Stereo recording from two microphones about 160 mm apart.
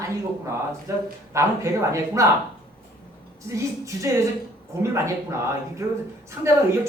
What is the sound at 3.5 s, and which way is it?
A woman's voice, 20° right (ahead or behind).